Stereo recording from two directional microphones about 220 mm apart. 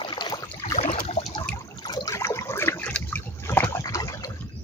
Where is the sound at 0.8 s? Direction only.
30° left (ahead or behind).